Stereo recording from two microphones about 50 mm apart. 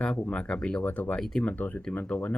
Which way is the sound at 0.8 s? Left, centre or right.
Left.